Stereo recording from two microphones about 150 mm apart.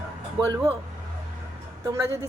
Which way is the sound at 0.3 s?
25° right (ahead or behind).